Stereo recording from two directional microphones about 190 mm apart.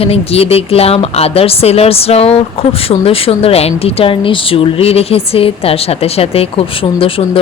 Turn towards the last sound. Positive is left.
turn(degrees=30)  # may be behind; listen again after turning